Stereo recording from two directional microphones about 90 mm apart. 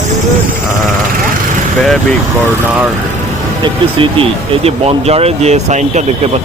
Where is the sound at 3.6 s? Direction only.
80° right.